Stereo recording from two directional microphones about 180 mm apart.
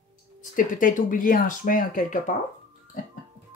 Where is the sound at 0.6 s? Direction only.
50° left (ahead or behind).